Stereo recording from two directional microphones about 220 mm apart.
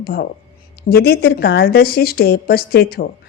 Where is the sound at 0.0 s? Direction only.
45° left (ahead or behind).